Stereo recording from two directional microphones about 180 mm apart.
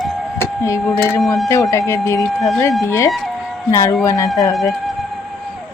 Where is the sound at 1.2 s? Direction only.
Centre (ahead or behind).